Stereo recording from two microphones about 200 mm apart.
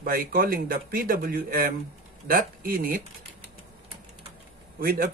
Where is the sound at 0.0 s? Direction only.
45° right (ahead or behind).